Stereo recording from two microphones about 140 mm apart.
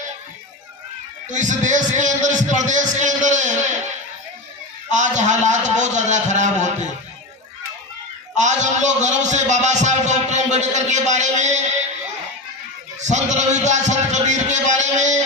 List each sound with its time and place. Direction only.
1.3 s a man's voice: 60° right (ahead or behind)
4.9 s a man's voice: 60° right (ahead or behind)
8.4 s a man's voice: 60° right (ahead or behind)
13.0 s a man's voice: 55° right (ahead or behind)